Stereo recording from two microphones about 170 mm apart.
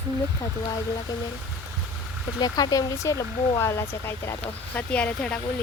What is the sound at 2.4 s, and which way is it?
Speech, 25° left (ahead or behind).